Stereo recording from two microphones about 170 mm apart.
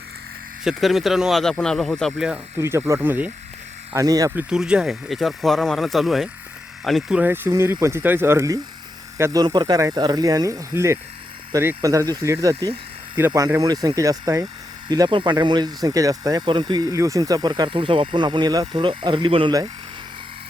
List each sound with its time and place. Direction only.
0.6 s speech: centre (ahead or behind)
2.6 s speech: 15° right (ahead or behind)
3.9 s speech: 20° right (ahead or behind)
4.4 s speech: 5° right (ahead or behind); by 19.5 s 30° right (ahead or behind)